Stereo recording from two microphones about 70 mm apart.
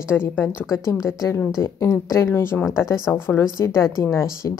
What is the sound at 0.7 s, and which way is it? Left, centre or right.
A woman's voice, left.